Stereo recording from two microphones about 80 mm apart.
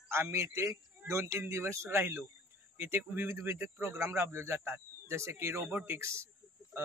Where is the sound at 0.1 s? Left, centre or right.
Right.